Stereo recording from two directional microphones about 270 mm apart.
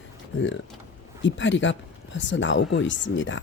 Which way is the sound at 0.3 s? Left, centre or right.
Left.